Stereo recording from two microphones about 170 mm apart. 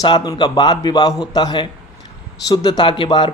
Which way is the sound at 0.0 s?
25° left (ahead or behind).